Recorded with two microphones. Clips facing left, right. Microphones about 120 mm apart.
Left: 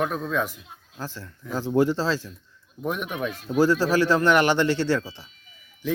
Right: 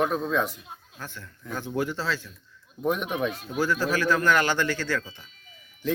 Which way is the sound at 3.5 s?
35° left (ahead or behind).